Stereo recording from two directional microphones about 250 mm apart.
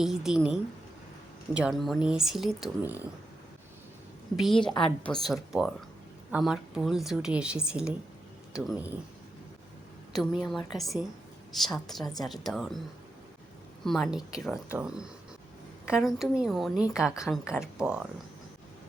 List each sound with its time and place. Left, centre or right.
0.0 s a woman's voice: centre
4.4 s a woman's voice: centre
10.1 s a woman's voice: centre
13.8 s a woman's voice: centre